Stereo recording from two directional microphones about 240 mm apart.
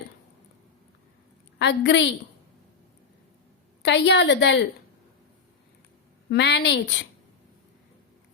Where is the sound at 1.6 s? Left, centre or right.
Left.